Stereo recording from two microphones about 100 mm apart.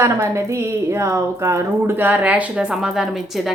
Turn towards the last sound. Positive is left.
turn(degrees=-10)  # may be behind; listen again after turning